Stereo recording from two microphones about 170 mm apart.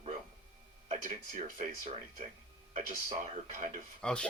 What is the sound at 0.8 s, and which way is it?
Speech, 50° right (ahead or behind).